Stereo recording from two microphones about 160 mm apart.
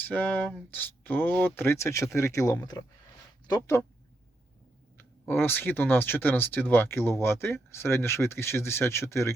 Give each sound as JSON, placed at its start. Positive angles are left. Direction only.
{"t": 0.0, "sound": "speech", "side_deg": 10}
{"t": 4.9, "sound": "speech", "side_deg": 15}